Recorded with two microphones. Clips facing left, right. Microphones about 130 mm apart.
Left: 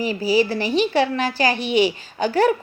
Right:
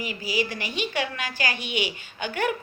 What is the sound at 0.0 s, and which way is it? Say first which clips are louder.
Speech: left 9 dB; 35° left (ahead or behind).